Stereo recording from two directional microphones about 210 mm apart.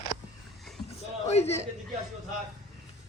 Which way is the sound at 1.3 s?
30° left (ahead or behind).